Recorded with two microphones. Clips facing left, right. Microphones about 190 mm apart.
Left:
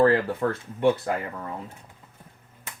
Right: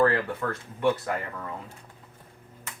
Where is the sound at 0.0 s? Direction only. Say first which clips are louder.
Left 4 dB; 25° left (ahead or behind).